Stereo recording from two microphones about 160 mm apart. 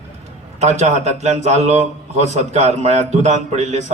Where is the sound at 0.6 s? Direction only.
45° right (ahead or behind).